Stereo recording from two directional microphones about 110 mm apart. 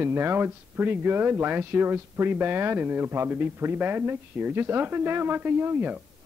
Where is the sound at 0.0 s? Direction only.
20° right (ahead or behind).